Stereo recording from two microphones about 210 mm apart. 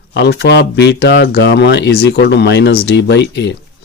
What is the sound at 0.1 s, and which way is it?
Speech, 55° left (ahead or behind).